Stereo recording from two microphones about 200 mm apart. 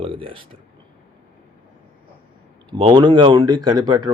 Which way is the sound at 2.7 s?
25° right (ahead or behind).